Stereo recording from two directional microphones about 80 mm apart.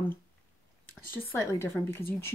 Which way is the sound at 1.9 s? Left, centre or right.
Left.